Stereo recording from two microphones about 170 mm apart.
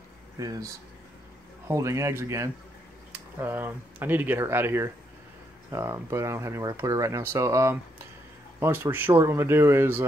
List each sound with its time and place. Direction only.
0.4 s speech: 20° right (ahead or behind)